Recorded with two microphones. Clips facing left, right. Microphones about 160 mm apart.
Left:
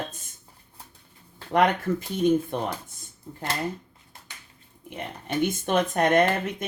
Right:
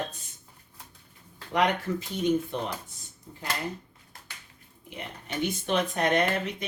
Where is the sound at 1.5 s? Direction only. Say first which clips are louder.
Left 4 dB; 50° left (ahead or behind).